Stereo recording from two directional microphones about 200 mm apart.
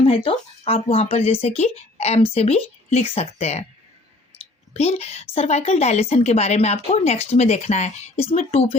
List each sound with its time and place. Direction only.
0.1 s a woman's voice: 30° left (ahead or behind)
4.7 s a woman's voice: 30° left (ahead or behind)